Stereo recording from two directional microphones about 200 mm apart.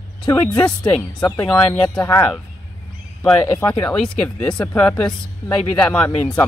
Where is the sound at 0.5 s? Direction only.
5° left (ahead or behind).